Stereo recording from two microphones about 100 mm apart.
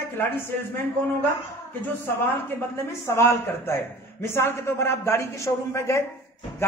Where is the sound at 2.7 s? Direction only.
25° left (ahead or behind).